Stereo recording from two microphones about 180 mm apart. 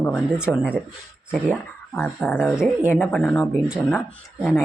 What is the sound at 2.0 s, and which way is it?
Speech, 10° left (ahead or behind).